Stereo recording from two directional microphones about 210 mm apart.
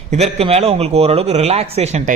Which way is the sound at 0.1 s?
30° right (ahead or behind).